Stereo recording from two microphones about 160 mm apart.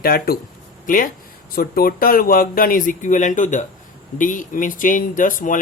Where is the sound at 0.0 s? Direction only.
70° left (ahead or behind).